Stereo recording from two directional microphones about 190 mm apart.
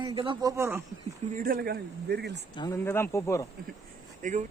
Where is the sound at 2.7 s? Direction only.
15° left (ahead or behind).